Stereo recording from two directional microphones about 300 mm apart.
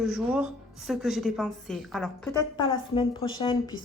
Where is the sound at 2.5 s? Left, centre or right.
Centre.